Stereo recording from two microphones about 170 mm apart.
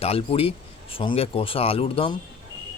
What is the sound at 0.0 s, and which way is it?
Speech, 35° left (ahead or behind).